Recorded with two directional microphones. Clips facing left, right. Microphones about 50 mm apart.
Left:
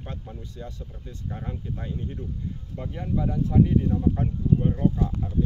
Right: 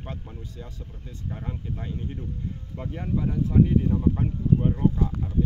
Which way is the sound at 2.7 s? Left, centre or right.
Right.